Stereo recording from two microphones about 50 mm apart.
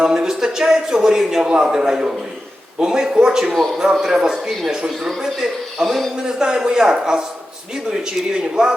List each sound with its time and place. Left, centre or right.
0.0 s a man's voice: centre
3.5 s speech: centre
4.0 s speech: centre
6.2 s speech: centre